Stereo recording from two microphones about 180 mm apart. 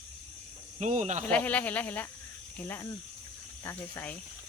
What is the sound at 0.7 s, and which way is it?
Speech, 40° right (ahead or behind).